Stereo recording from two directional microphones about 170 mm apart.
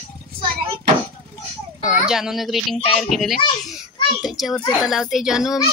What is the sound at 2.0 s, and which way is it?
A woman's voice, centre (ahead or behind).